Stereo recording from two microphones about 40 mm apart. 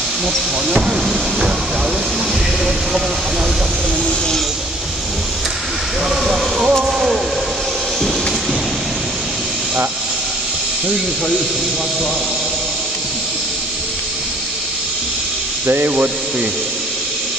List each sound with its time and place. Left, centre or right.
0.7 s speech: centre
6.0 s speech: centre
6.8 s a sound: centre
15.6 s speech: right